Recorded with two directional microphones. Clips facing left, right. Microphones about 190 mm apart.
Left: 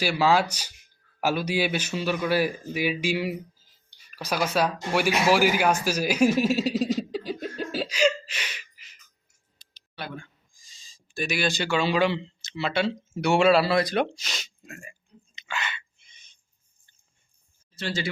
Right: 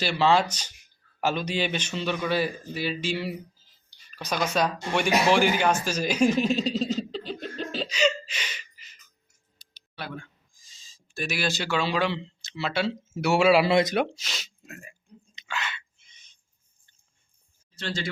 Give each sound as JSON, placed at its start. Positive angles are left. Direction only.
{"t": 0.0, "sound": "speech", "side_deg": 10}
{"t": 5.8, "sound": "chuckle", "side_deg": 10}
{"t": 9.9, "sound": "speech", "side_deg": 0}
{"t": 13.7, "sound": "speech", "side_deg": -20}
{"t": 13.9, "sound": "speech", "side_deg": -5}
{"t": 15.4, "sound": "a sound", "side_deg": 0}
{"t": 17.7, "sound": "speech", "side_deg": 5}